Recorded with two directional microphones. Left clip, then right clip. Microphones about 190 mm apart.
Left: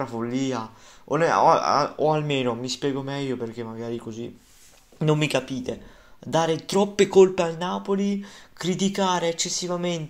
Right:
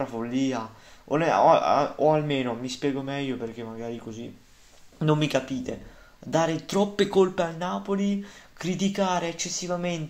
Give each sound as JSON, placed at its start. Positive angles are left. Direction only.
{"t": 0.0, "sound": "a man's voice", "side_deg": 30}